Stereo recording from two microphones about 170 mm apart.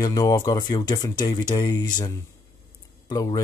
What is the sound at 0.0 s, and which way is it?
Speech, 25° left (ahead or behind).